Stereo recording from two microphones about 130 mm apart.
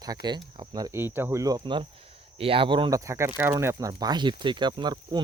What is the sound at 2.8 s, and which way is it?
Speech, 25° right (ahead or behind).